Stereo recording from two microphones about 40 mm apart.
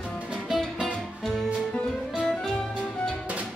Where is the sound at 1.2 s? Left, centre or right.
Centre.